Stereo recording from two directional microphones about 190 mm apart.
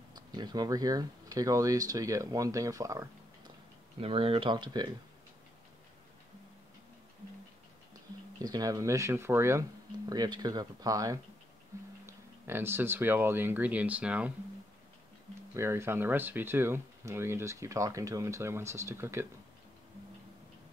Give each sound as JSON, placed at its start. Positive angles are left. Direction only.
{"t": 0.1, "sound": "speech", "side_deg": -20}
{"t": 4.0, "sound": "speech", "side_deg": -30}
{"t": 8.4, "sound": "speech", "side_deg": -20}
{"t": 11.7, "sound": "music", "side_deg": -15}
{"t": 12.1, "sound": "speech", "side_deg": -10}
{"t": 15.5, "sound": "speech", "side_deg": -15}